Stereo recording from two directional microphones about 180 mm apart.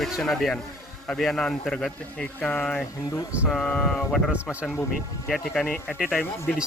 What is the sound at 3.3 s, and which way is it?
Speech, 5° right (ahead or behind).